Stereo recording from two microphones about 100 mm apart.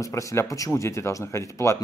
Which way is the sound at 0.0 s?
30° left (ahead or behind).